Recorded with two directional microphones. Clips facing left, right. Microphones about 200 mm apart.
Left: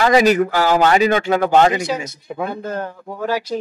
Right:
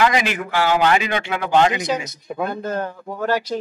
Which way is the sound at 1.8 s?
10° left (ahead or behind).